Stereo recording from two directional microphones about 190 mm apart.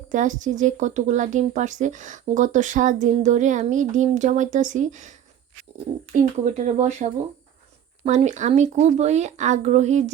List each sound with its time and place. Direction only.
0.1 s speech: 40° right (ahead or behind)
6.4 s speech: 40° right (ahead or behind)